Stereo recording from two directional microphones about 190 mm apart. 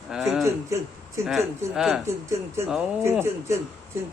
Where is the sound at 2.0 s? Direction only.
15° right (ahead or behind).